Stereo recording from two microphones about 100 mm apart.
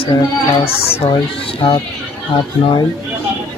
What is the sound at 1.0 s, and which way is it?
Speech, 90° left.